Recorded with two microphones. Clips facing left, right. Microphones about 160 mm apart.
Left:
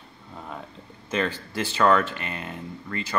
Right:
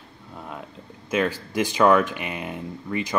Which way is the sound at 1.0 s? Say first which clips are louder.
Right 3 dB; 10° right (ahead or behind).